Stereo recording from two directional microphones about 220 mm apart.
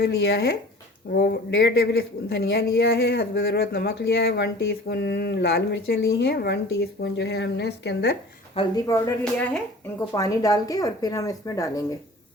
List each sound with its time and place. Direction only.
0.0 s a woman's voice: 50° left (ahead or behind)
8.5 s speech: 15° left (ahead or behind)